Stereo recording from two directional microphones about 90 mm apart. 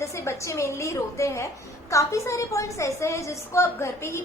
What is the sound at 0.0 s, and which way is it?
A woman's voice, 30° left (ahead or behind).